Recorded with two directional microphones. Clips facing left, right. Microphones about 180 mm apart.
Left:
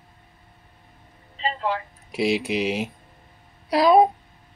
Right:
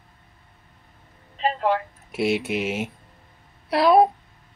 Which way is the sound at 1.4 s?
50° right (ahead or behind).